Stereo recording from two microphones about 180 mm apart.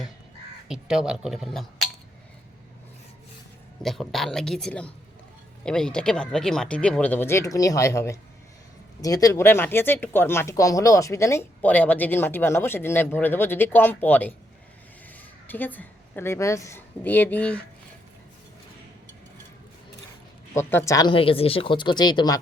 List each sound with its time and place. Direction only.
0.7 s speech: 5° right (ahead or behind)
3.8 s speech: centre (ahead or behind)
15.4 s speech: 10° left (ahead or behind)
20.5 s speech: 15° left (ahead or behind)